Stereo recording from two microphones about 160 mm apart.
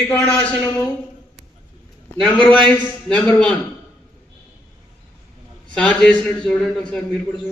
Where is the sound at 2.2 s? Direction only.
5° left (ahead or behind).